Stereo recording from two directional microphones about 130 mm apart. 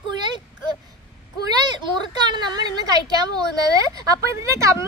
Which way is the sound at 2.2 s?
35° right (ahead or behind).